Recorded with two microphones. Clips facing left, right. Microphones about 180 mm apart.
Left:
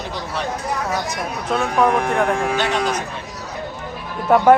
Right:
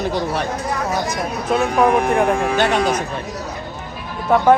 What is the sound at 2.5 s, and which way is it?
Speech, 55° right (ahead or behind).